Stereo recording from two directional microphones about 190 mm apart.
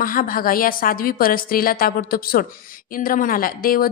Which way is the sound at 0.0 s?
50° left (ahead or behind).